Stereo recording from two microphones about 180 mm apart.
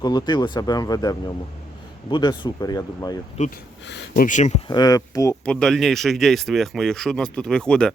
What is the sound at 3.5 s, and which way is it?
Speech, 75° left (ahead or behind).